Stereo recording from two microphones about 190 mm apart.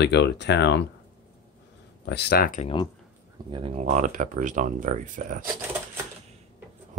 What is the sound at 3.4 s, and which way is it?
Speech, 25° right (ahead or behind).